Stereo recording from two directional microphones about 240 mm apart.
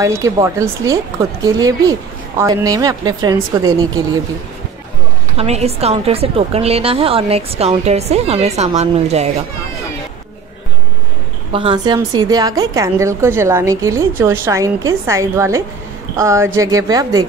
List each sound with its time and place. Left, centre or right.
0.0 s a woman's voice: centre
5.4 s a woman's voice: right
11.5 s a woman's voice: right